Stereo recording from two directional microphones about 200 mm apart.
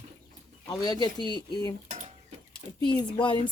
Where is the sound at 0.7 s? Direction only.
20° left (ahead or behind).